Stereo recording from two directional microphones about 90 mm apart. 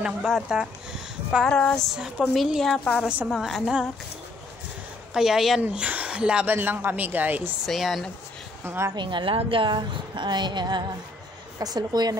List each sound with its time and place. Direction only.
0.0 s speech: 5° right (ahead or behind)
1.5 s music: 10° left (ahead or behind)
2.0 s a woman's voice: 5° right (ahead or behind)
5.1 s a woman's voice: 5° right (ahead or behind)
5.6 s speech: 15° right (ahead or behind)
7.6 s a woman's voice: centre (ahead or behind)
8.6 s speech: 30° right (ahead or behind)
8.9 s a woman's voice: 60° right (ahead or behind)